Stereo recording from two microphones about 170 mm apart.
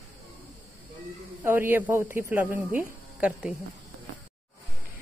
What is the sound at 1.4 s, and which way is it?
Speech, 15° right (ahead or behind).